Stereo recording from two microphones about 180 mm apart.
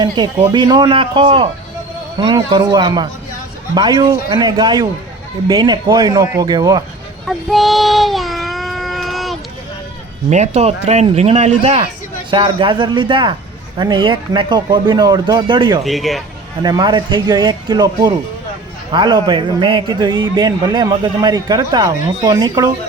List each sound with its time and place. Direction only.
0.2 s a man's voice: 25° right (ahead or behind)
7.3 s child singing: centre (ahead or behind)
10.2 s a man's voice: 40° right (ahead or behind)
12.3 s a man's voice: 25° right (ahead or behind)
15.8 s speech: centre (ahead or behind)
16.6 s a man's voice: 25° right (ahead or behind)